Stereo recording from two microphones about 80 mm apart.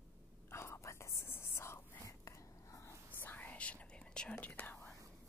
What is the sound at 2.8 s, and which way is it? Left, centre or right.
Whispering, left.